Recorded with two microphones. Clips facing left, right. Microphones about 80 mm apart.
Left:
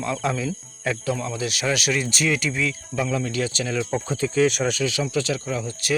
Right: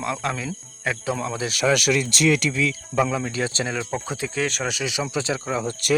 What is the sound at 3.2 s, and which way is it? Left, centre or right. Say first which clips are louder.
Speech: even; right.